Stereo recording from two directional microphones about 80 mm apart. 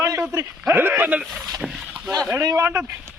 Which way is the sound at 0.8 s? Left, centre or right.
Right.